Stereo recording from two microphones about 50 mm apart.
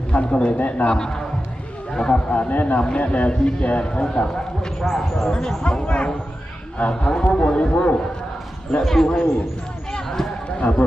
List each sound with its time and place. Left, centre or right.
0.1 s a man's voice: left
0.9 s speech: centre
2.3 s speech: left
2.7 s a man's voice: left
8.8 s a man's voice: centre
9.9 s basketball bounce: centre
10.6 s a man's voice: left